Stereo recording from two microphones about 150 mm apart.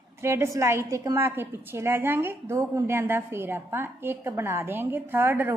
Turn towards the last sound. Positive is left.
turn(degrees=-15)  # may be behind; listen again after turning